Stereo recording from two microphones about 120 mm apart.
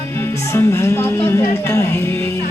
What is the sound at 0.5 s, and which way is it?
Speech, 25° left (ahead or behind).